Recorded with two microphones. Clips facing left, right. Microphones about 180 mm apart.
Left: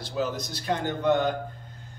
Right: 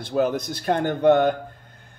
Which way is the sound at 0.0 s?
55° right (ahead or behind).